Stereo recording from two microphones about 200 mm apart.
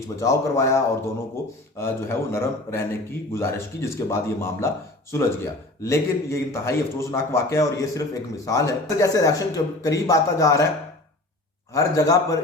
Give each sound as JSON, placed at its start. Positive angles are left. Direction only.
{"t": 0.2, "sound": "speech", "side_deg": 15}
{"t": 11.7, "sound": "speech", "side_deg": 15}